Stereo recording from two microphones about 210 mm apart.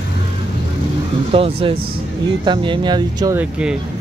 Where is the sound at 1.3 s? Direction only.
25° right (ahead or behind).